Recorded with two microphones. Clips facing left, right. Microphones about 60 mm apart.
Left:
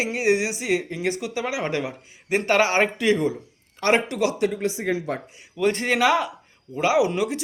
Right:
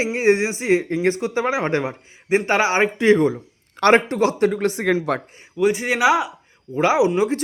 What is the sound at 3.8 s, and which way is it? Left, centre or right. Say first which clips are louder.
Speech: right 5 dB; right.